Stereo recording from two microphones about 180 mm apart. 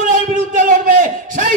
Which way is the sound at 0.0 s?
45° right (ahead or behind).